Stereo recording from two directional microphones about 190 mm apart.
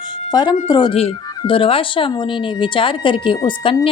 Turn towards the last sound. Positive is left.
turn(degrees=25)  # may be behind; listen again after turning